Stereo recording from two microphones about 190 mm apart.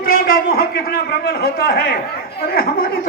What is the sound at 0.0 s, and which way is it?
A man's voice, 50° left (ahead or behind).